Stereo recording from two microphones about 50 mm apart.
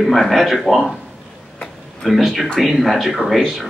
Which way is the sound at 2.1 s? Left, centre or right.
Centre.